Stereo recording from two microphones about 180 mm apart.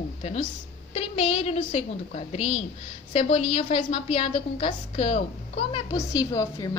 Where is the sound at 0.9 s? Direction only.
35° left (ahead or behind).